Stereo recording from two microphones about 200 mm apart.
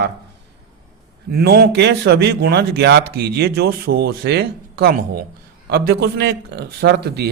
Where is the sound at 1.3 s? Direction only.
50° right (ahead or behind).